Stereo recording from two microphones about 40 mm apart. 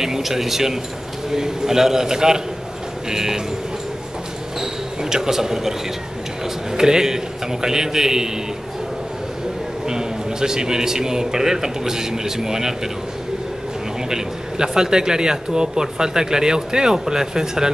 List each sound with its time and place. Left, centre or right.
0.0 s speech: centre
5.1 s speech: centre
6.8 s speech: centre
9.8 s speech: centre
14.0 s speech: centre